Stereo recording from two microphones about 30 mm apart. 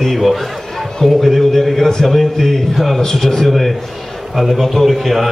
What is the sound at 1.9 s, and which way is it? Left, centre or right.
A man's voice, centre.